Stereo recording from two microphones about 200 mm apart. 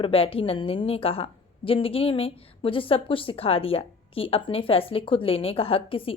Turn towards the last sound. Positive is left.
turn(degrees=25)  # may be behind; listen again after turning